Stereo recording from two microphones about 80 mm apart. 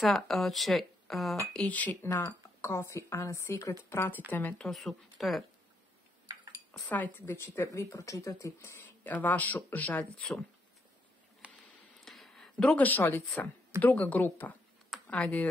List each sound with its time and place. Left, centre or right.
0.0 s speech: centre
1.5 s speech: centre
2.0 s speech: left
4.6 s speech: centre
6.9 s speech: left
7.2 s speech: left
9.0 s speech: left
11.4 s a sound: centre
12.0 s a sound: centre
13.8 s speech: centre
14.9 s computer keyboard: centre